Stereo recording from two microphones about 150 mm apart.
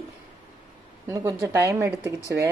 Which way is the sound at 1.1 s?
20° right (ahead or behind).